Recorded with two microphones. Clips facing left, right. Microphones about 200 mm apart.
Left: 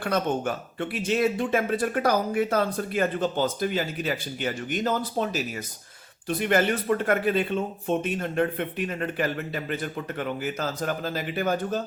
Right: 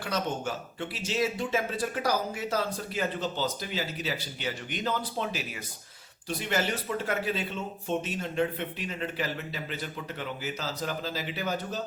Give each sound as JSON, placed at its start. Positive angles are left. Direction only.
{"t": 0.0, "sound": "speech", "side_deg": 55}
{"t": 6.2, "sound": "speech", "side_deg": 55}